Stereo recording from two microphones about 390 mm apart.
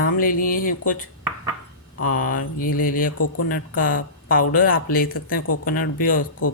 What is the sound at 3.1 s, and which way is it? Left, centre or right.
Speech, left.